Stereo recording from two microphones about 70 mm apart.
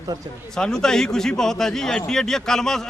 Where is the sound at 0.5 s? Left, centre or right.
Centre.